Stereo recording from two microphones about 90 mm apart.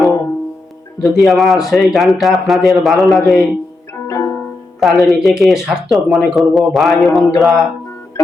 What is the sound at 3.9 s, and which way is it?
Music, 30° left (ahead or behind).